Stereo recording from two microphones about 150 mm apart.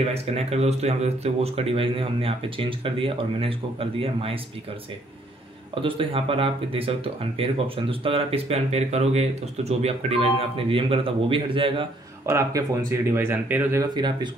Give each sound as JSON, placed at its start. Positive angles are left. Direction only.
{"t": 0.0, "sound": "speech", "side_deg": -45}
{"t": 5.8, "sound": "speech", "side_deg": -35}
{"t": 12.3, "sound": "speech", "side_deg": -20}
{"t": 13.9, "sound": "speech", "side_deg": -30}